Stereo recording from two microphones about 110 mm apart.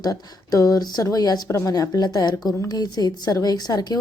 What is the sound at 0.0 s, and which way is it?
A woman's voice, 35° left (ahead or behind).